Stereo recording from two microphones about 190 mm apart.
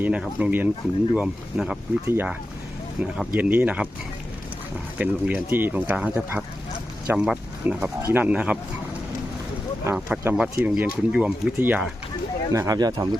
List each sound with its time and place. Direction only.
0.0 s speech: 5° right (ahead or behind)
4.9 s speech: 10° right (ahead or behind)
9.8 s speech: 10° right (ahead or behind)
12.5 s speech: 20° right (ahead or behind)